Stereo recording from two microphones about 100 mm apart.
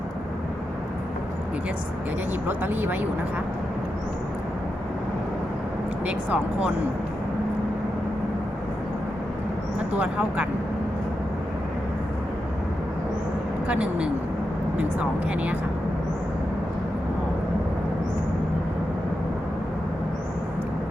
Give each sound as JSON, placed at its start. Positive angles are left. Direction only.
{"t": 2.5, "sound": "speech", "side_deg": -20}
{"t": 6.1, "sound": "speech", "side_deg": -10}
{"t": 9.9, "sound": "speech", "side_deg": -15}
{"t": 13.7, "sound": "speech", "side_deg": -15}